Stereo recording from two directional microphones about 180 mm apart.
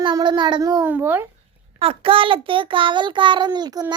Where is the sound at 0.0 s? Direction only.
25° right (ahead or behind).